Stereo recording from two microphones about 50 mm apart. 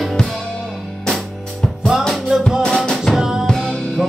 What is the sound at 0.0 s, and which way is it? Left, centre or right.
Music, centre.